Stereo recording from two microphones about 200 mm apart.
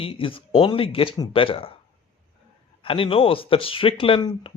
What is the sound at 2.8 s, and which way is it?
Speech, 25° left (ahead or behind).